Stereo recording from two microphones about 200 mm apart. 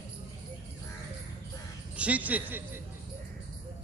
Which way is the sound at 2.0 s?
5° right (ahead or behind).